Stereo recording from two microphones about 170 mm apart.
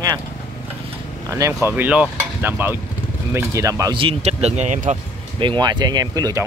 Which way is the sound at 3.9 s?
35° right (ahead or behind).